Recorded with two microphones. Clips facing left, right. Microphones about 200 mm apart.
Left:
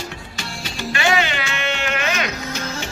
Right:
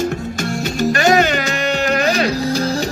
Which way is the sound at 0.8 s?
40° right (ahead or behind).